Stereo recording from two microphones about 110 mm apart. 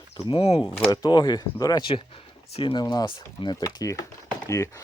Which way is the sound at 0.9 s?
40° left (ahead or behind).